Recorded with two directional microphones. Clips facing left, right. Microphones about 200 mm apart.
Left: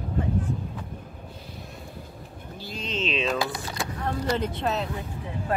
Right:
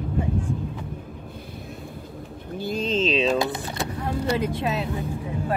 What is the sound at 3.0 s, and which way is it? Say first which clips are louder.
Speech: right 4 dB; 35° right (ahead or behind).